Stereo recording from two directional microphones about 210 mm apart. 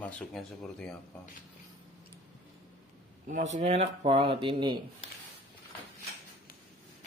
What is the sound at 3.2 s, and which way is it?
Speech, 35° right (ahead or behind).